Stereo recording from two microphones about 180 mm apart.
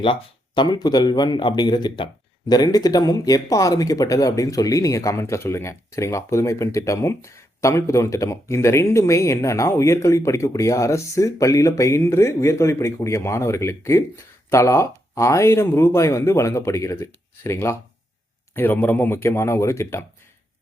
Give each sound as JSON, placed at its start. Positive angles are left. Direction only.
{"t": 0.0, "sound": "speech", "side_deg": 25}